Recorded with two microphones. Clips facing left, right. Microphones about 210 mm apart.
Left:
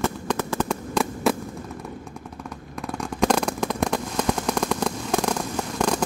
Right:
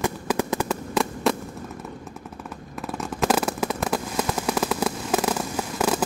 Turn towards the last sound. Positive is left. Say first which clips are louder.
# even
turn(degrees=-5)  # may be behind; listen again after turning